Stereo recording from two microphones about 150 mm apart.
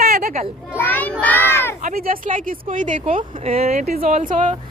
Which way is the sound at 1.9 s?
75° right (ahead or behind).